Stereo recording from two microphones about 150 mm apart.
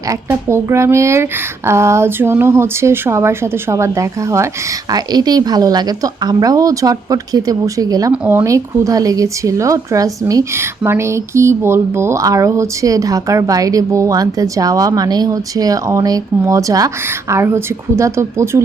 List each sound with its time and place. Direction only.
0.1 s speech: 15° right (ahead or behind)
8.1 s speech: 10° right (ahead or behind)